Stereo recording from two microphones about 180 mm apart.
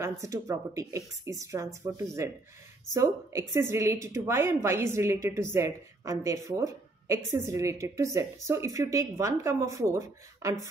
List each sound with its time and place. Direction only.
0.0 s a woman's voice: 15° right (ahead or behind)